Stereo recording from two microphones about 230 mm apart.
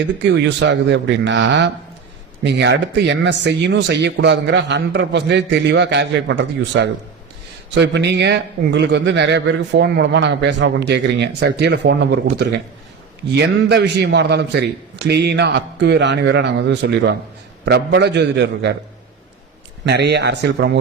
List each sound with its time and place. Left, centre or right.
0.3 s speech: right
19.8 s speech: right